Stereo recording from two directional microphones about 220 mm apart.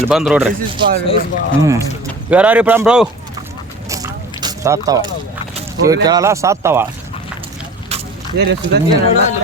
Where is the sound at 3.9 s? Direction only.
15° right (ahead or behind).